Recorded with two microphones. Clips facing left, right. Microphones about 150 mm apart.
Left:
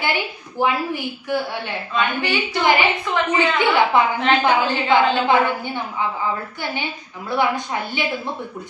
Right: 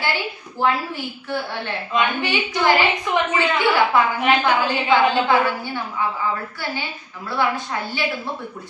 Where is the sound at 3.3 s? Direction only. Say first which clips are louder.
Left 2 dB; 20° left (ahead or behind).